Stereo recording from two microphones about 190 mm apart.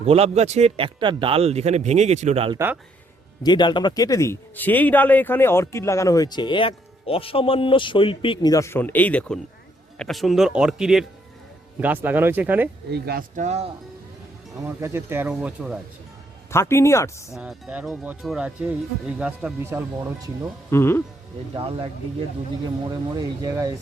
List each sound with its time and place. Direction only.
0.0 s speech: 30° right (ahead or behind)
3.4 s speech: 25° left (ahead or behind); by 12.6 s 10° right (ahead or behind)
12.9 s speech: 50° right (ahead or behind); by 13.7 s 35° right (ahead or behind)
14.8 s speech: 15° right (ahead or behind)
16.5 s speech: 15° left (ahead or behind)
17.3 s speech: 5° right (ahead or behind)
20.7 s speech: 15° left (ahead or behind)
22.6 s speech: 20° right (ahead or behind)